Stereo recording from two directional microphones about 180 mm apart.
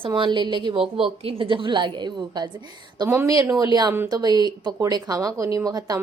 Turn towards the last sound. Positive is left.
turn(degrees=-20)  # may be behind; listen again after turning